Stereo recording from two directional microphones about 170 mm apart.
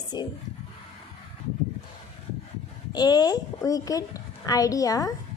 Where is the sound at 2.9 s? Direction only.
25° left (ahead or behind).